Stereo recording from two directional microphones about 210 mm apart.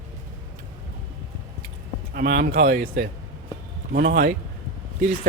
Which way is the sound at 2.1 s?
45° right (ahead or behind).